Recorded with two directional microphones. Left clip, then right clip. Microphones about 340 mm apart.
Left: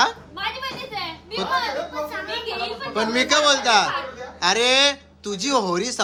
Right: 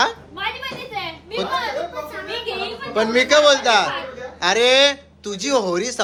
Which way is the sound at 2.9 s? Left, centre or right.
Centre.